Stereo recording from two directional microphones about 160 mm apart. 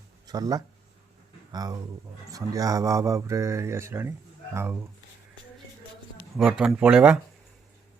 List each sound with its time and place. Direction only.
0.3 s speech: 25° right (ahead or behind)
6.3 s speech: centre (ahead or behind)
6.7 s speech: 10° right (ahead or behind)